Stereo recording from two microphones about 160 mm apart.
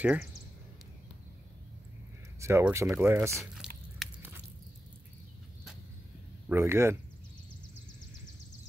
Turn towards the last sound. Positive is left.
turn(degrees=-15)  # may be behind; listen again after turning